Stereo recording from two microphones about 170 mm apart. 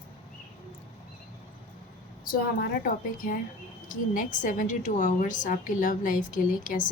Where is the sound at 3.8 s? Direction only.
50° left (ahead or behind).